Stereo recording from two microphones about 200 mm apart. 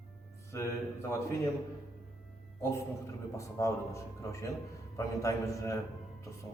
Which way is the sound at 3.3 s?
15° left (ahead or behind).